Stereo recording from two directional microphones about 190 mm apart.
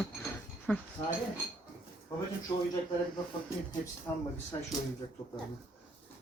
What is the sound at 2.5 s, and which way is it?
Speech, 25° left (ahead or behind).